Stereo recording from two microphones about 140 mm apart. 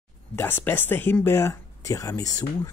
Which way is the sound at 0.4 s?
15° left (ahead or behind).